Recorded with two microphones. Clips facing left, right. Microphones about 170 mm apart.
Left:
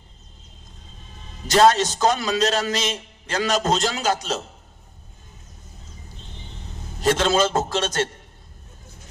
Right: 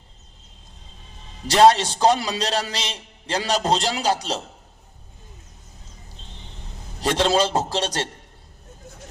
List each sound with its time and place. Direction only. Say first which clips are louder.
1.5 s a man's voice: right 1 dB; 30° right (ahead or behind)
7.0 s a man's voice: left 1 dB; 30° right (ahead or behind)